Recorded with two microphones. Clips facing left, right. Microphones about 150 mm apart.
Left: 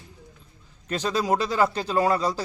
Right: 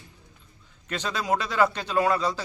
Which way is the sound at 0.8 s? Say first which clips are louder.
Left 4 dB; 35° left (ahead or behind).